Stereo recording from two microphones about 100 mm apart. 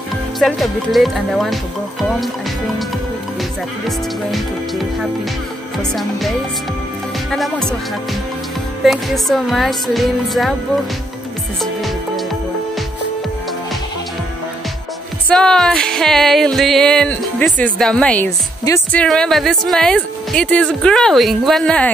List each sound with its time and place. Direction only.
0.4 s music: centre (ahead or behind)
3.8 s music: centre (ahead or behind)
15.2 s music: 5° left (ahead or behind)